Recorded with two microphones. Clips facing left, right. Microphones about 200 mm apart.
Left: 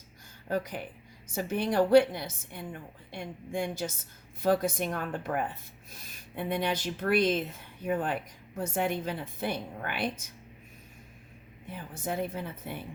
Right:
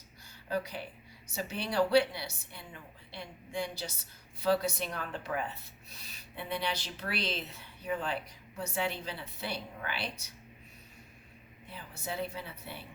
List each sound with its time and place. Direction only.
0.4 s a woman's voice: 50° left (ahead or behind)
11.7 s a woman's voice: 50° left (ahead or behind)